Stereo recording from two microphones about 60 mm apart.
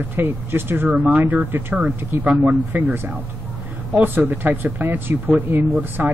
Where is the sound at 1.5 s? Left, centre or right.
Right.